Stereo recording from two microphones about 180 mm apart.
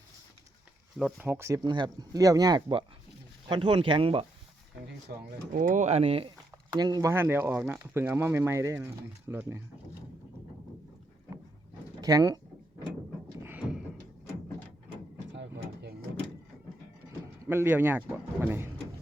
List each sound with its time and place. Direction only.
0.9 s speech: centre (ahead or behind)
1.3 s speech: 15° right (ahead or behind)
5.1 s speech: 60° right (ahead or behind)
5.5 s speech: 45° right (ahead or behind)
6.7 s speech: 20° right (ahead or behind)
11.9 s speech: 20° right (ahead or behind)
13.4 s a sound: 10° right (ahead or behind)
15.3 s a sound: 75° right (ahead or behind)
17.4 s speech: 15° right (ahead or behind)